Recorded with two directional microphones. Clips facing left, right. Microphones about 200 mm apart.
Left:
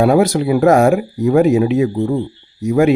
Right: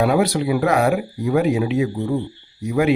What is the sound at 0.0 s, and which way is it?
Speech, 45° left (ahead or behind).